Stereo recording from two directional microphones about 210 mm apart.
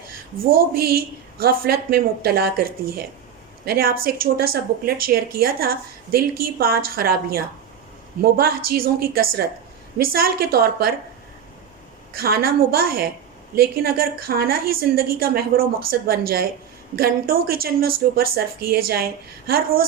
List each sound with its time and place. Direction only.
0.3 s a woman's voice: 45° right (ahead or behind)
12.1 s a woman's voice: 45° right (ahead or behind)